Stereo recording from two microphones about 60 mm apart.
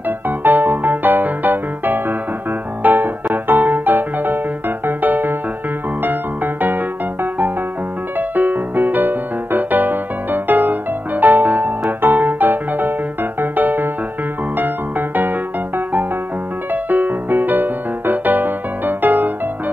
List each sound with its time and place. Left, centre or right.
0.4 s music: right
8.2 s music: right
16.7 s music: right